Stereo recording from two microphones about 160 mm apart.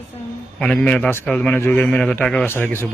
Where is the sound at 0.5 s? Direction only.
5° left (ahead or behind).